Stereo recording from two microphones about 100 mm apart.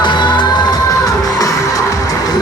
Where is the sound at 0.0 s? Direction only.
50° left (ahead or behind).